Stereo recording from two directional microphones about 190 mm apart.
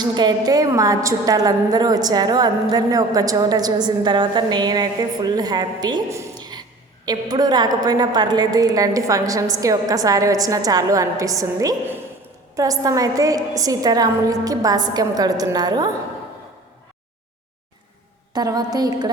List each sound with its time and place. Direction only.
0.0 s a woman's voice: 20° right (ahead or behind)
18.3 s a woman's voice: 20° right (ahead or behind)